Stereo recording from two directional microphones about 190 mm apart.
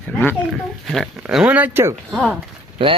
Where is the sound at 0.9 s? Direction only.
Centre (ahead or behind).